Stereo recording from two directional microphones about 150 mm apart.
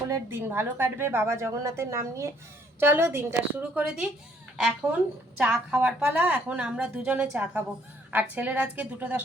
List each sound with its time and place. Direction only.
0.1 s a woman's voice: 15° right (ahead or behind)